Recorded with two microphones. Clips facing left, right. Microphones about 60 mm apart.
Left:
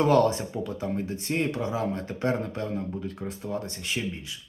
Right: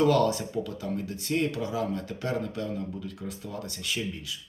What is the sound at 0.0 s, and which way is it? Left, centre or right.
Speech, left.